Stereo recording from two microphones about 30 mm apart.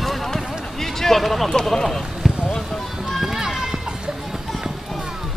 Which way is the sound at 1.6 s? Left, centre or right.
Centre.